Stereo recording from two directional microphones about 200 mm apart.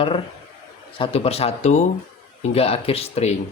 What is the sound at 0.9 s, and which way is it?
A man's voice, 30° left (ahead or behind).